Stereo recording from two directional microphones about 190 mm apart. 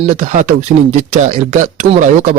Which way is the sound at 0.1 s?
40° right (ahead or behind).